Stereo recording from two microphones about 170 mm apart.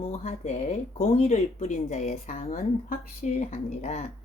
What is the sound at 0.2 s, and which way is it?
A woman's voice, 40° left (ahead or behind).